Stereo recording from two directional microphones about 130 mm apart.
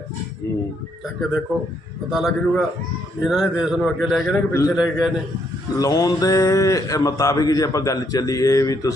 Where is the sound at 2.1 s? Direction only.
5° right (ahead or behind).